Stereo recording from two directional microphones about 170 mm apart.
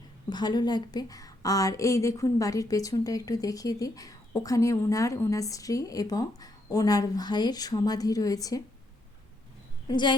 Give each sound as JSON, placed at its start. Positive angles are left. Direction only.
{"t": 0.3, "sound": "a woman's voice", "side_deg": 25}
{"t": 9.9, "sound": "a woman's voice", "side_deg": 25}